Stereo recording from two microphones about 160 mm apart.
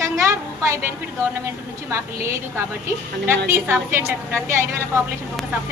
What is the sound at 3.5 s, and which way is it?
A woman's voice, 15° right (ahead or behind).